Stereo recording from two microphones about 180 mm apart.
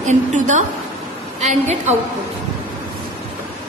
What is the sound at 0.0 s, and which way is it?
A woman's voice, 40° right (ahead or behind).